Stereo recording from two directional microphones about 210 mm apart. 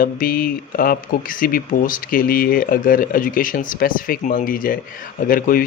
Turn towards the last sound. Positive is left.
turn(degrees=40)  # may be behind; listen again after turning